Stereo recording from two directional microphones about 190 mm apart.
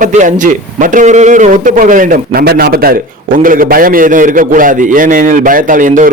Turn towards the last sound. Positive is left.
turn(degrees=-45)  # may be behind; listen again after turning